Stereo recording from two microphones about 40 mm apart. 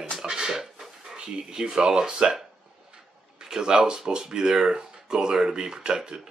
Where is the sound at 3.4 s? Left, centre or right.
Centre.